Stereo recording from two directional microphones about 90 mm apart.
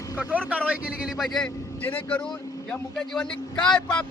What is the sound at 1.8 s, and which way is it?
A man's voice, 20° left (ahead or behind).